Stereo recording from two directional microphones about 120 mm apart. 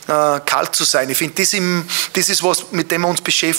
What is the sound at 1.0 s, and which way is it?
Speech, 15° right (ahead or behind).